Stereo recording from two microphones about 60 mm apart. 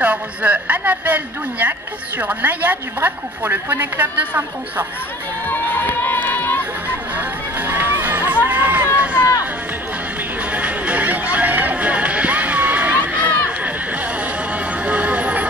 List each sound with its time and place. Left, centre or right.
0.0 s speech: right
5.5 s run: left
7.2 s music: right
8.5 s chatter: right
10.5 s music: right
14.9 s a sound: right